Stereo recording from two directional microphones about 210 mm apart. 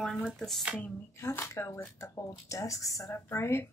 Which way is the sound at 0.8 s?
10° left (ahead or behind).